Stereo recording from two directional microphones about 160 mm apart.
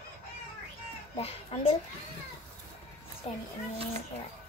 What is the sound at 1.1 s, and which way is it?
Speech, 40° left (ahead or behind).